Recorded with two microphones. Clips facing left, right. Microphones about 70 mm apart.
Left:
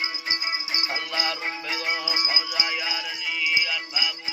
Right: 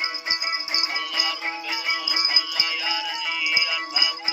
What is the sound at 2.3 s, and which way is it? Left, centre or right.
Music, left.